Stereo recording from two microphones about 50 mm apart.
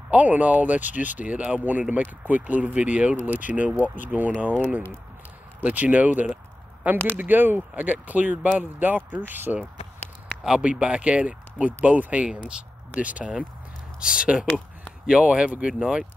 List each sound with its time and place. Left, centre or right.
0.1 s speech: right
10.6 s speech: right
15.8 s speech: centre